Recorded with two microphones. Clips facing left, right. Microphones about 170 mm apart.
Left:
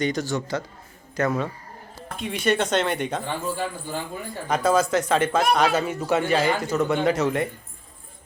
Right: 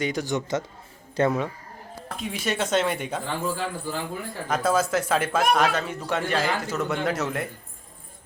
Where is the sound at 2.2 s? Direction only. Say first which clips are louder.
Left 5 dB; centre (ahead or behind).